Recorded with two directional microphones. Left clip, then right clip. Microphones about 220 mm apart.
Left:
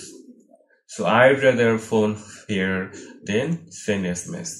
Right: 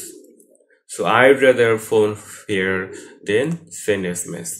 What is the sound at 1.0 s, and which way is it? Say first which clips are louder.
Speech: right 3 dB; 45° right (ahead or behind).